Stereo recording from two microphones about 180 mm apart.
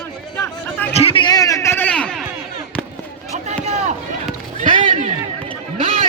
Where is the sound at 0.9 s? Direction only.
30° left (ahead or behind); by 2.2 s 5° left (ahead or behind).